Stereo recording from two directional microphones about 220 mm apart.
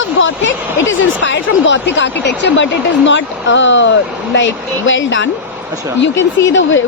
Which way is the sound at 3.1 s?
55° left (ahead or behind).